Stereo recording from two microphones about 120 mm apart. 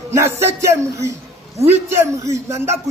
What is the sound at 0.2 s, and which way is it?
Speech, 20° right (ahead or behind).